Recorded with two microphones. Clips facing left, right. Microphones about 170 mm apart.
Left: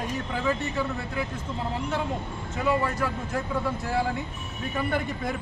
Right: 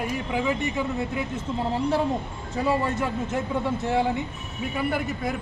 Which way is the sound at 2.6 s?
30° right (ahead or behind).